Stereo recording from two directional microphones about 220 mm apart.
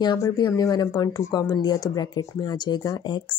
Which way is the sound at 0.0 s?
20° left (ahead or behind).